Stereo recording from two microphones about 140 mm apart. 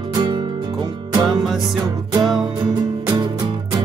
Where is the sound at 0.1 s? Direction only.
30° right (ahead or behind).